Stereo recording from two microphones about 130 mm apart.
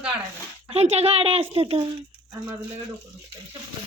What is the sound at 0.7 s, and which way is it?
Speech, 55° right (ahead or behind).